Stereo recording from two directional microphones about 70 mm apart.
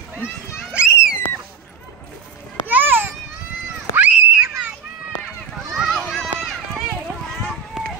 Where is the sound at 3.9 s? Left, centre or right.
Right.